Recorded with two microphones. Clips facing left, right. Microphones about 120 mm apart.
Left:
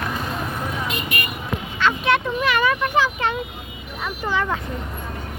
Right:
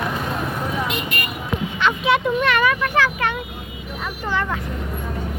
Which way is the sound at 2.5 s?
25° left (ahead or behind).